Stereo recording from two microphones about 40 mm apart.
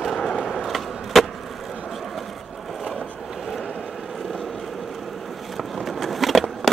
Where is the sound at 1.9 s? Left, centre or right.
Centre.